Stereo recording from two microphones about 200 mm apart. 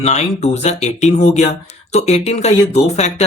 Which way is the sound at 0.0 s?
35° left (ahead or behind).